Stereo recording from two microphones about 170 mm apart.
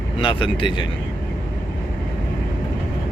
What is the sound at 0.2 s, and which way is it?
Speech, 30° left (ahead or behind).